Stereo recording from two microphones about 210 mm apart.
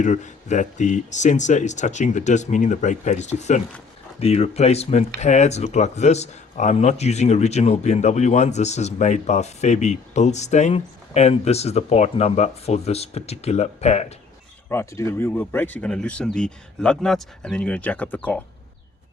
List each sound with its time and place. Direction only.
0.0 s speech: 35° left (ahead or behind)
14.7 s speech: 15° left (ahead or behind)